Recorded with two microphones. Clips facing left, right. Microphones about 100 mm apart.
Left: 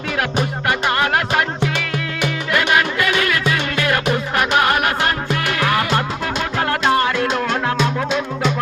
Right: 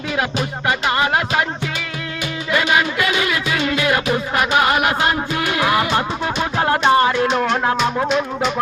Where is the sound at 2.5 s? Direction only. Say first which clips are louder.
Even; 5° right (ahead or behind).